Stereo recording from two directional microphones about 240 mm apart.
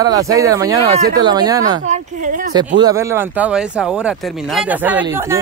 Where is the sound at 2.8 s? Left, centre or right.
Centre.